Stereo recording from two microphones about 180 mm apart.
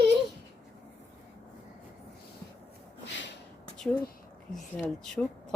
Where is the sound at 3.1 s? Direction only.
90° left.